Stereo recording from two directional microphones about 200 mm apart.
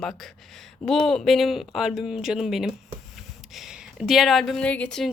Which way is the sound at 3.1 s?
Centre (ahead or behind).